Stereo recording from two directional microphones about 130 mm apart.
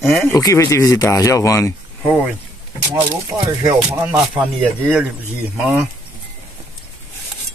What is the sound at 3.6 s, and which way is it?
Music, 20° right (ahead or behind).